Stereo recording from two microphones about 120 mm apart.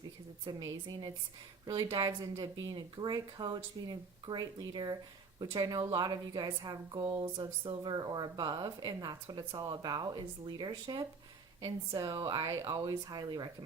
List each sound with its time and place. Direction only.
0.4 s a woman's voice: 35° right (ahead or behind)